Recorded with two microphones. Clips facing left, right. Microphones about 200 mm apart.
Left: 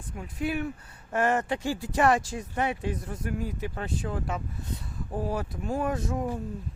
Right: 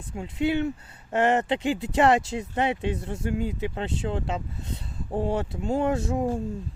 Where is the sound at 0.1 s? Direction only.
25° right (ahead or behind).